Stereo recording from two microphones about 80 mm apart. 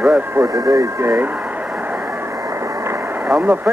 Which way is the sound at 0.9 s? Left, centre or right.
Right.